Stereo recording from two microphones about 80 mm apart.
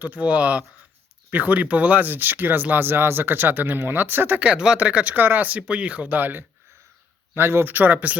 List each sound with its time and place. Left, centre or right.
0.0 s speech: centre